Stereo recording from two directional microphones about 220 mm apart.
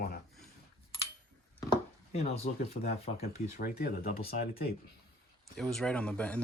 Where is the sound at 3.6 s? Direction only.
45° left (ahead or behind).